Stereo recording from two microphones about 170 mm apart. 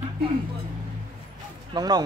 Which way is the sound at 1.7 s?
25° right (ahead or behind).